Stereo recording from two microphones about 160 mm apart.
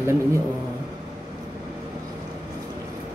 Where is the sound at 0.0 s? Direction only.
20° right (ahead or behind).